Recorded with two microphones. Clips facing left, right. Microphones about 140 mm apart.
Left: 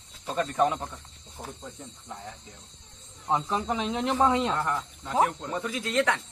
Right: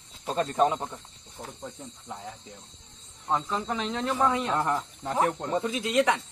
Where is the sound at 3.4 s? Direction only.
15° left (ahead or behind).